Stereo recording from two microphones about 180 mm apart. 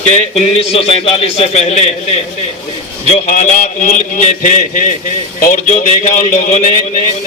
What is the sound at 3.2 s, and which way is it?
A man's voice, 40° left (ahead or behind).